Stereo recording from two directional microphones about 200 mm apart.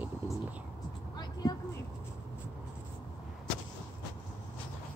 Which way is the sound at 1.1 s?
20° left (ahead or behind).